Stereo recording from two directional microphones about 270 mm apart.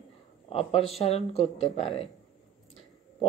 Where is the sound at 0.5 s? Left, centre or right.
Left.